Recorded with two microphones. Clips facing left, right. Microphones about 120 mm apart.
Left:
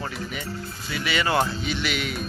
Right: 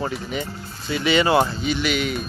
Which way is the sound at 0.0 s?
25° right (ahead or behind).